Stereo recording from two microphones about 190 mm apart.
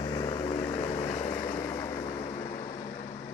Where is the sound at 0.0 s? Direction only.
20° left (ahead or behind).